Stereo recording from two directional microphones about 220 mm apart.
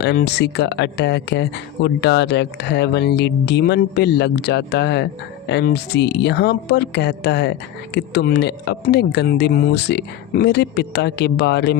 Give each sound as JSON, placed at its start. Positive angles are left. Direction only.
{"t": 0.0, "sound": "speech", "side_deg": 50}